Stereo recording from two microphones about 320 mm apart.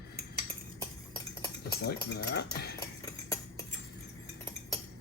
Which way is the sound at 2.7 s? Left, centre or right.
Centre.